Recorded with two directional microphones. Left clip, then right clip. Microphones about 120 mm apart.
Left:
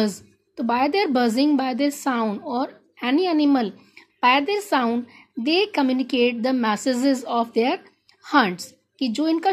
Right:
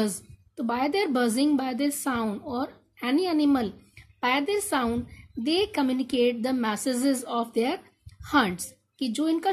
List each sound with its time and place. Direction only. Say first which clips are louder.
0.0 s a woman's voice: left 5 dB; 15° left (ahead or behind)